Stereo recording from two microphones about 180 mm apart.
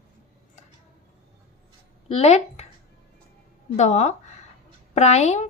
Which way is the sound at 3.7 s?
40° left (ahead or behind).